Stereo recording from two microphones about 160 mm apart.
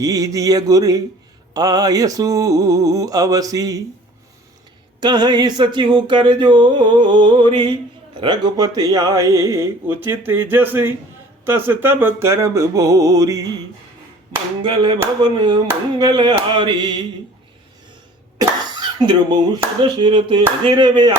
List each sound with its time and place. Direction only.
0.0 s speech: 20° right (ahead or behind)
4.9 s speech: 25° right (ahead or behind)
11.4 s music: 15° right (ahead or behind)
14.6 s a sound: 30° right (ahead or behind)
15.2 s speech: 30° right (ahead or behind)
16.0 s a sound: 30° right (ahead or behind)
18.3 s cough: 25° right (ahead or behind)
19.8 s speech: 30° right (ahead or behind)